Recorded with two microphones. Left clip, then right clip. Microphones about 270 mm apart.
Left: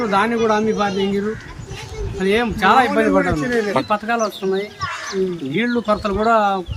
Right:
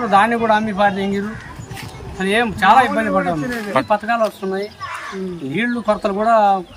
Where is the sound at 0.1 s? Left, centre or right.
Centre.